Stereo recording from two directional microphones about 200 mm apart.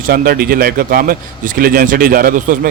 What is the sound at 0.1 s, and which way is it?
Speech, 50° right (ahead or behind).